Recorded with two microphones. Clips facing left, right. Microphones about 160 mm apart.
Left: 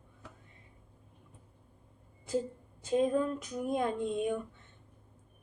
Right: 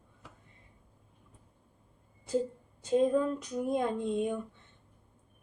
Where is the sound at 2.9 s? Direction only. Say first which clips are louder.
Right 2 dB; 10° left (ahead or behind).